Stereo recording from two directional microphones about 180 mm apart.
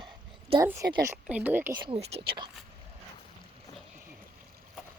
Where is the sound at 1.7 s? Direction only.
30° right (ahead or behind).